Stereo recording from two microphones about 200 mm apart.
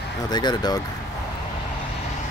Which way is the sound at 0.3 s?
20° left (ahead or behind).